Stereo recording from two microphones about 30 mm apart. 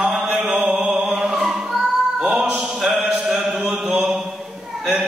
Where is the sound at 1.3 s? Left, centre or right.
Centre.